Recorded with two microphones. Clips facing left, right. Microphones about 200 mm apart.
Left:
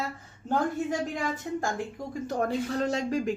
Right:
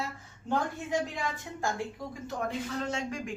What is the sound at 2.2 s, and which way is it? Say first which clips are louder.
Speech: left 6 dB; 40° left (ahead or behind).